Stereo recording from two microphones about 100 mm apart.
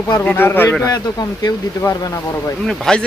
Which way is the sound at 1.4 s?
40° left (ahead or behind).